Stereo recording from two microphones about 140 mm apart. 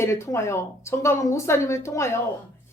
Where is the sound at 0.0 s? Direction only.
20° left (ahead or behind).